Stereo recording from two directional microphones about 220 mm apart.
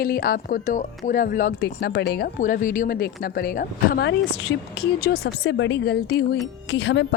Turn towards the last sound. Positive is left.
turn(degrees=55)  # may be behind; listen again after turning